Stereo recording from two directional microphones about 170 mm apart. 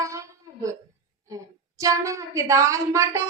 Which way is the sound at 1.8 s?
20° right (ahead or behind).